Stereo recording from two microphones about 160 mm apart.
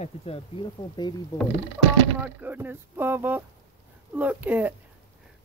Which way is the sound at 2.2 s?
10° right (ahead or behind).